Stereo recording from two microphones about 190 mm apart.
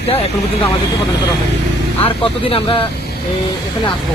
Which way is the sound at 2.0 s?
30° left (ahead or behind).